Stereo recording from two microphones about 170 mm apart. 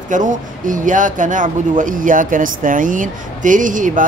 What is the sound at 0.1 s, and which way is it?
Speech, 50° right (ahead or behind).